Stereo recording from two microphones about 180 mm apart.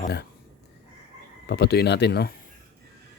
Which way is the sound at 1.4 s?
65° left (ahead or behind).